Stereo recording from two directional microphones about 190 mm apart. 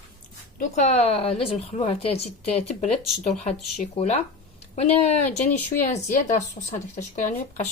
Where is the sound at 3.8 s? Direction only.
35° left (ahead or behind).